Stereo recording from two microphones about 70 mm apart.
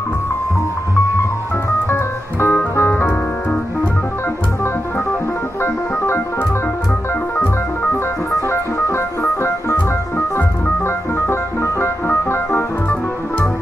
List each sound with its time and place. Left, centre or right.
2.4 s music: left
5.6 s organ: left
7.9 s organ: left
11.1 s organ: left